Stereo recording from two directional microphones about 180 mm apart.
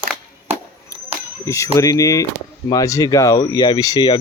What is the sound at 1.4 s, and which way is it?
Speech, 15° left (ahead or behind).